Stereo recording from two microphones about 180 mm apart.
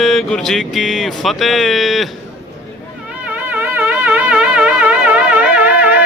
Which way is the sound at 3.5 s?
10° right (ahead or behind).